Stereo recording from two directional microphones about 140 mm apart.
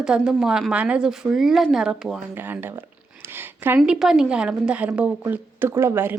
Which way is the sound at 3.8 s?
5° right (ahead or behind).